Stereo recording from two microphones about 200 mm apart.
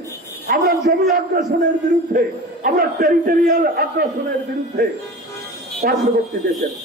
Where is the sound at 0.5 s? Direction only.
50° right (ahead or behind).